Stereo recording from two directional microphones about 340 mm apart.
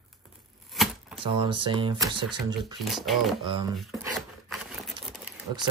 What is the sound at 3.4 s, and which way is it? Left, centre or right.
Speech, centre.